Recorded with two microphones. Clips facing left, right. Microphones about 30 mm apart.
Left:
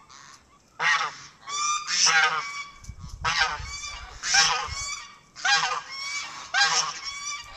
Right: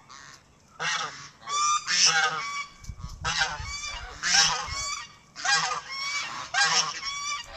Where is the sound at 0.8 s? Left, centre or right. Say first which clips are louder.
Left 6 dB; left.